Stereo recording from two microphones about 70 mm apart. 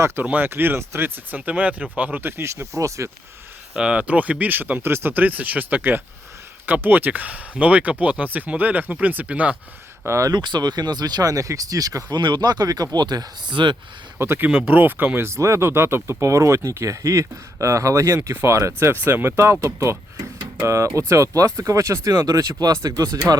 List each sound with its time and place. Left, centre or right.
0.2 s speech: right
1.4 s speech: right
3.8 s speech: centre
10.1 s speech: right
10.3 s speech: right
14.2 s speech: right
14.7 s speech: right
23.3 s speech: right